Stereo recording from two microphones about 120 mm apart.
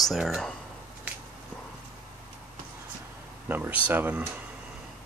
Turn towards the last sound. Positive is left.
turn(degrees=-15)  # may be behind; listen again after turning